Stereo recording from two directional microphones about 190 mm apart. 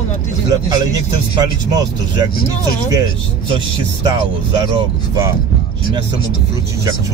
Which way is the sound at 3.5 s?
20° right (ahead or behind).